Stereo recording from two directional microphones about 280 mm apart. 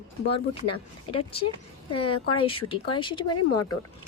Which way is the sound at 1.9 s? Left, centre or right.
Left.